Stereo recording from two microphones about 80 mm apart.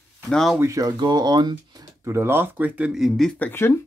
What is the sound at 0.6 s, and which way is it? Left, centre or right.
Speech, right.